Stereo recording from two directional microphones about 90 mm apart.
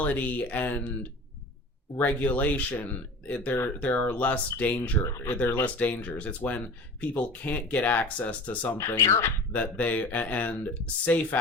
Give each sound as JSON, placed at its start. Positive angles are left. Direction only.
{"t": 0.0, "sound": "speech", "side_deg": 15}
{"t": 2.0, "sound": "speech", "side_deg": 20}
{"t": 5.0, "sound": "speech", "side_deg": 30}
{"t": 8.8, "sound": "speech", "side_deg": 30}
{"t": 9.5, "sound": "speech", "side_deg": 15}